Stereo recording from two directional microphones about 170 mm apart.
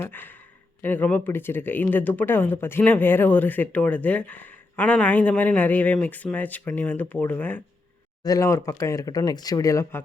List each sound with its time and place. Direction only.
0.0 s speech: 10° left (ahead or behind)